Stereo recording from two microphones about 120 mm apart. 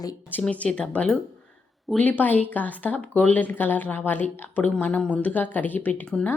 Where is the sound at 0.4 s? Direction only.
10° left (ahead or behind).